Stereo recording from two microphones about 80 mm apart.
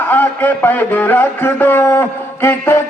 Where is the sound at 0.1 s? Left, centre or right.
Left.